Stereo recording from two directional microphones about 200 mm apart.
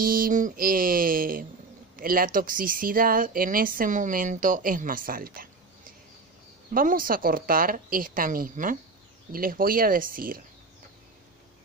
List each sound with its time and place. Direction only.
0.0 s speech: 45° right (ahead or behind)
6.7 s speech: 45° right (ahead or behind)